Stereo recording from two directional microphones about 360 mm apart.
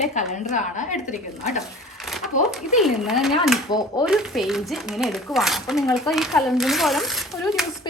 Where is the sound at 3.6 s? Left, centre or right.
Centre.